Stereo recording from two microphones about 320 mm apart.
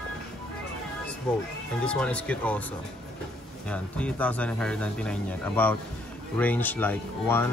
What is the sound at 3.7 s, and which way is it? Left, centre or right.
Speech, centre.